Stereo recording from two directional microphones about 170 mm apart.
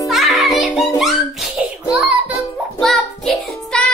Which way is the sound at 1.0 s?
Centre (ahead or behind).